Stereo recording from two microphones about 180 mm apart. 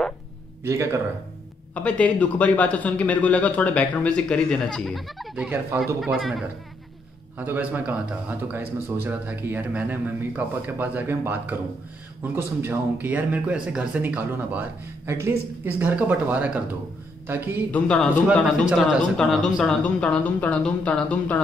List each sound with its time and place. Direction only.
0.7 s speech: 15° right (ahead or behind)
1.7 s a man's voice: 5° left (ahead or behind)
7.3 s speech: 10° right (ahead or behind)
17.6 s a man's voice: 5° left (ahead or behind)